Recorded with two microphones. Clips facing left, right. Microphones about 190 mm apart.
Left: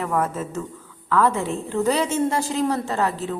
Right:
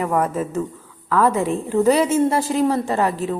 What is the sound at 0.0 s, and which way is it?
A woman's voice, 15° right (ahead or behind).